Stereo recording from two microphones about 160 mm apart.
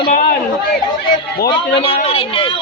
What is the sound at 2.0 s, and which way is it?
Speech, 35° left (ahead or behind).